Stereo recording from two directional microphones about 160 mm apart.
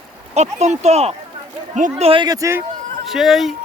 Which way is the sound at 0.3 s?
45° right (ahead or behind).